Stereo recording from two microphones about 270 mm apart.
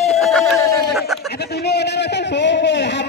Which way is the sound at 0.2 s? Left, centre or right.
Centre.